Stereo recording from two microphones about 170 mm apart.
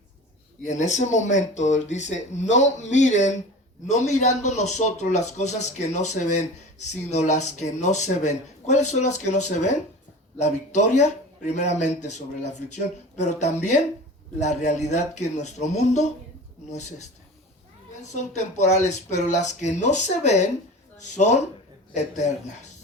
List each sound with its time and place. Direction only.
0.6 s a man's voice: 45° left (ahead or behind)
18.1 s a man's voice: 40° left (ahead or behind)